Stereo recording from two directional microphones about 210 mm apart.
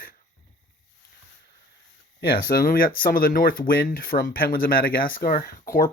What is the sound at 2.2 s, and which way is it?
Speech, 45° left (ahead or behind).